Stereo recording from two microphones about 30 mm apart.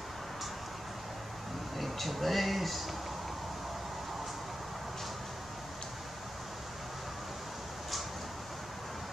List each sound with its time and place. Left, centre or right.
1.8 s speech: centre